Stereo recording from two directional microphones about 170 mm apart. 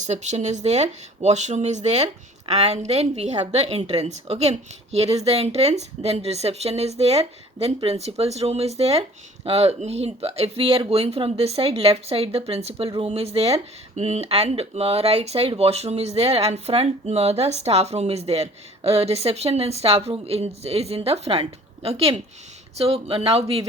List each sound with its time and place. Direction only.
0.0 s speech: 45° right (ahead or behind)